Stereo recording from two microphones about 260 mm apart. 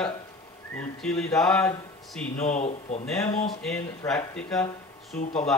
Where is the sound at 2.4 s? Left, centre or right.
Left.